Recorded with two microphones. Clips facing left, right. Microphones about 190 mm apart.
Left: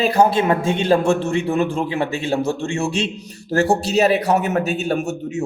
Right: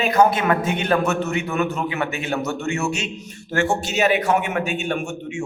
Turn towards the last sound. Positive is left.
turn(degrees=40)  # may be behind; listen again after turning